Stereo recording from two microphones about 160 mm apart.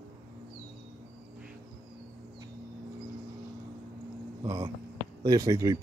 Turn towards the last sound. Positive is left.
turn(degrees=-20)  # may be behind; listen again after turning